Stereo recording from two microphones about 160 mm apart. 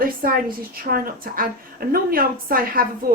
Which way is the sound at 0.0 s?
65° right (ahead or behind).